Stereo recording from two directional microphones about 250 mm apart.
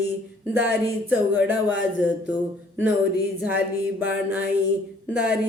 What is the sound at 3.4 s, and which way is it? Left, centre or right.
A man's voice, centre.